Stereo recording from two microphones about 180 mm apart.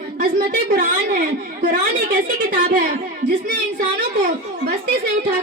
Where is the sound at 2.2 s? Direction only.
50° right (ahead or behind).